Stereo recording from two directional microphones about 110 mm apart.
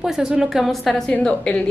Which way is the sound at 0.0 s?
5° right (ahead or behind).